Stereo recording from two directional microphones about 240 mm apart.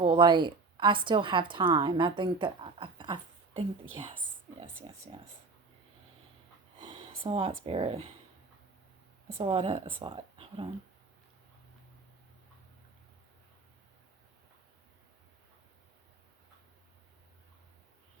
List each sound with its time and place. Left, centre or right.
0.0 s a woman's voice: right
5.1 s speech: right
6.7 s a sound: right
7.6 s speech: right
9.4 s speech: right